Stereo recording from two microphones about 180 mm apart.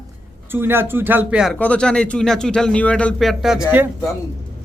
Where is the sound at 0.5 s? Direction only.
10° right (ahead or behind).